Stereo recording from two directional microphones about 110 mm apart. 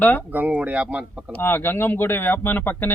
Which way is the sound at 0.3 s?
15° right (ahead or behind).